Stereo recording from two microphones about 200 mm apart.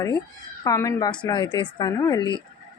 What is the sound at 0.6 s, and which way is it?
A woman's voice, 15° left (ahead or behind).